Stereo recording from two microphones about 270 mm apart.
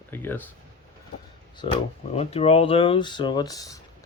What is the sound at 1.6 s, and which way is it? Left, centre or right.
Speech, left.